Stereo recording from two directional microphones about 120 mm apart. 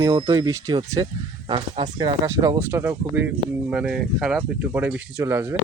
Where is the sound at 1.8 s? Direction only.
30° right (ahead or behind).